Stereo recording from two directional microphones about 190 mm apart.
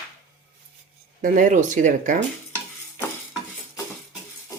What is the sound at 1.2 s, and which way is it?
Speech, 40° right (ahead or behind).